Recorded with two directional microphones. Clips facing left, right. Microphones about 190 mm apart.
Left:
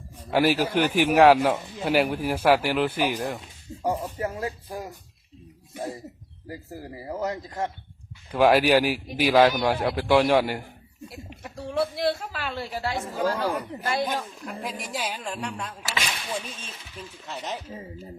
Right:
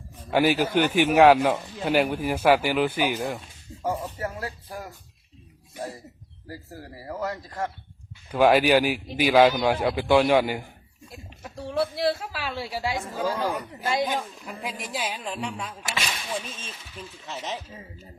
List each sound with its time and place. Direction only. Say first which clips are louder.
0.3 s a man's voice: even; centre (ahead or behind)
3.8 s a sound: left 2 dB; 20° left (ahead or behind)
6.5 s speech: left 3 dB; 15° left (ahead or behind)
8.3 s a man's voice: even; centre (ahead or behind)